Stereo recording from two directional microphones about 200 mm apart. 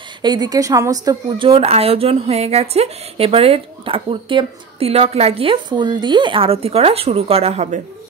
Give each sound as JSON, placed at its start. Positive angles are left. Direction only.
{"t": 0.2, "sound": "a woman's voice", "side_deg": -20}